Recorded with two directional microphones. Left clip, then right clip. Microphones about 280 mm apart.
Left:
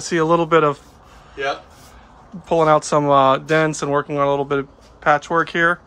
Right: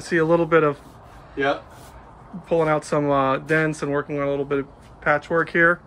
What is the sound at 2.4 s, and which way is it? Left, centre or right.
Speech, centre.